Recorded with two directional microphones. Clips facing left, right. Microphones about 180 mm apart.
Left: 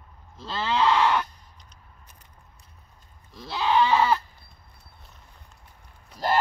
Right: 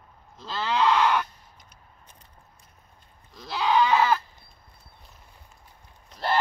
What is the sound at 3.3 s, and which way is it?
Goat, centre (ahead or behind).